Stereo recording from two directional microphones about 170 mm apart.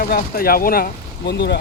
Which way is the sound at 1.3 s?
75° left (ahead or behind).